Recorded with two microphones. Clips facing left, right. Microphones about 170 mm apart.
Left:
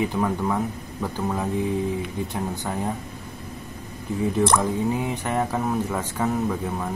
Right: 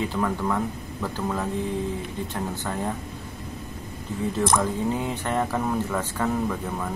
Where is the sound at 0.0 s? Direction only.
15° left (ahead or behind).